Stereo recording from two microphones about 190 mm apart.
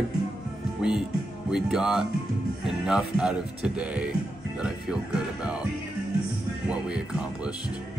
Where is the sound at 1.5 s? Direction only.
5° right (ahead or behind).